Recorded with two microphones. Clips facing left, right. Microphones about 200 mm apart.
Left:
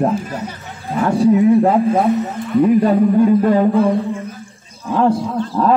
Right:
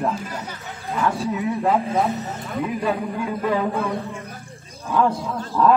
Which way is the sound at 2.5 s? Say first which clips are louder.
Left 12 dB; 50° left (ahead or behind).